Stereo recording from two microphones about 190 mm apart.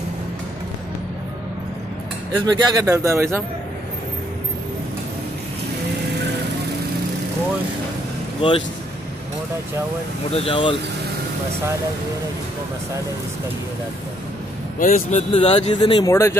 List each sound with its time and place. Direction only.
2.4 s speech: 20° right (ahead or behind)
8.4 s speech: 25° left (ahead or behind)
10.3 s speech: 30° left (ahead or behind)
14.8 s speech: 45° left (ahead or behind); by 16.1 s 25° left (ahead or behind)
16.1 s speech: 15° left (ahead or behind)